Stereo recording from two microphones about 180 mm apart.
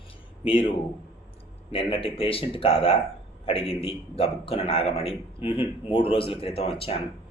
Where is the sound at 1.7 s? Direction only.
30° left (ahead or behind).